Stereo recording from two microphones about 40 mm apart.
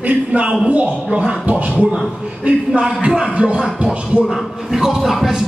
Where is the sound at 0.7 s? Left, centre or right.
Right.